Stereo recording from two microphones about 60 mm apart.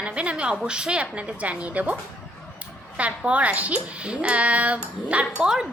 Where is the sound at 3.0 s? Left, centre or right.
Right.